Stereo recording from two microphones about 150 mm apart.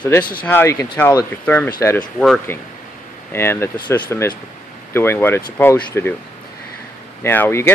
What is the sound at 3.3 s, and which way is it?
Speech, 15° left (ahead or behind).